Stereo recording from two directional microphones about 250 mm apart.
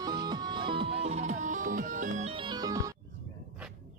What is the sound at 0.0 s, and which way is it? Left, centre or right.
Music, centre.